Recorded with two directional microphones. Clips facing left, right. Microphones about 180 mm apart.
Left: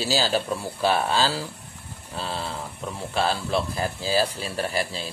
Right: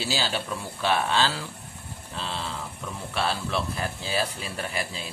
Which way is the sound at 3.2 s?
35° left (ahead or behind).